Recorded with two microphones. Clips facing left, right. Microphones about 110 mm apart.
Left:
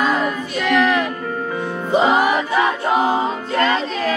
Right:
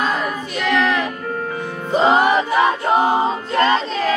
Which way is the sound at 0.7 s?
5° left (ahead or behind).